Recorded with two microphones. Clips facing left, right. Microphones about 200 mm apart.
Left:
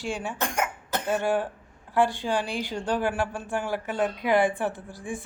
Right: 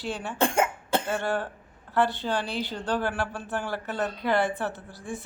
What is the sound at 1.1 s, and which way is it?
Speech, 10° left (ahead or behind).